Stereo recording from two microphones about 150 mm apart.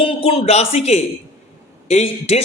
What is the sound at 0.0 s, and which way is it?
A man's voice, 40° left (ahead or behind).